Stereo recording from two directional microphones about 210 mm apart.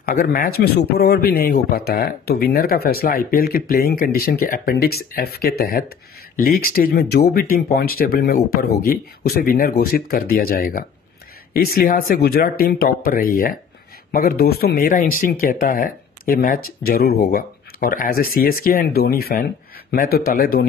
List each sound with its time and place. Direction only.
0.0 s speech: 45° left (ahead or behind)